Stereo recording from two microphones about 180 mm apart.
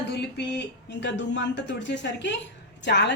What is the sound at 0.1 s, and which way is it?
A woman's voice, 70° left (ahead or behind).